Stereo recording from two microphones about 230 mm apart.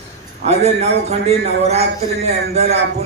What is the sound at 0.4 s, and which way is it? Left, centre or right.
A man's voice, right.